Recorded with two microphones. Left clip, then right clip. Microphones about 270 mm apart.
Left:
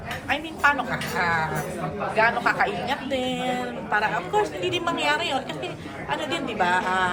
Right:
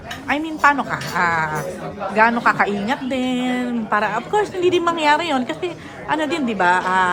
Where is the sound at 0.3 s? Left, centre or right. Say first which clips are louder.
Right 6 dB; right.